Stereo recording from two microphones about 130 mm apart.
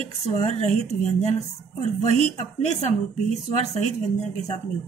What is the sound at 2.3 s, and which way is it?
Speech, 60° left (ahead or behind).